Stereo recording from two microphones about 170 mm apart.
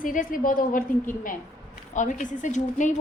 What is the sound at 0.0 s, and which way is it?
A woman's voice, 50° left (ahead or behind).